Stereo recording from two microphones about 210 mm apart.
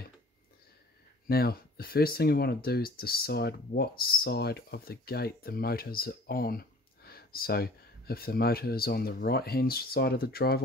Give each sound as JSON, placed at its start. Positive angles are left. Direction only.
{"t": 1.2, "sound": "speech", "side_deg": 45}